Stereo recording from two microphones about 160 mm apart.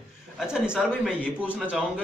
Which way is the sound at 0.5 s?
5° right (ahead or behind).